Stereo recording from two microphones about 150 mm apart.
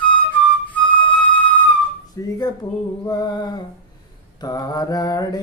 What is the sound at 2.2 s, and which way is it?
Mantra, 20° left (ahead or behind).